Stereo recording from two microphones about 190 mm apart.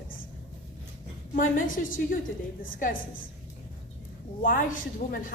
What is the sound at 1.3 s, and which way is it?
Speech, 45° left (ahead or behind).